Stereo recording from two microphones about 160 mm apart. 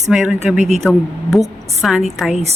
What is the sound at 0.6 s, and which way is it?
Speech, 45° right (ahead or behind).